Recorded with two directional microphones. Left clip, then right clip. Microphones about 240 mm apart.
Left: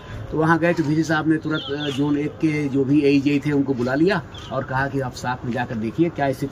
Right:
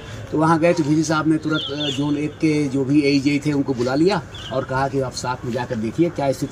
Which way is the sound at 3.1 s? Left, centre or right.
Centre.